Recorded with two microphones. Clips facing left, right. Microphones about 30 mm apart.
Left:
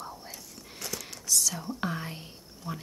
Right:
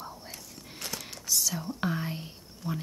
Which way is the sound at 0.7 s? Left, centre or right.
Right.